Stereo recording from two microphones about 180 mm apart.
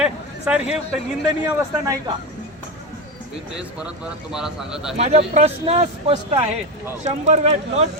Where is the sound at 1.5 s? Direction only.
20° right (ahead or behind).